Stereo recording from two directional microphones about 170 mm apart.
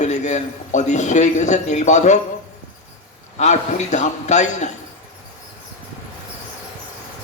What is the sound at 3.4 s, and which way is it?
A man's voice, 45° left (ahead or behind).